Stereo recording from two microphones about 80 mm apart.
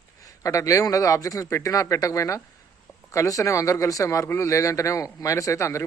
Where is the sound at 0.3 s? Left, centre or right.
Left.